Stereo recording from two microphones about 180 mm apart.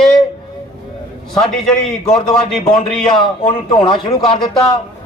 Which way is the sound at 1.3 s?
5° left (ahead or behind).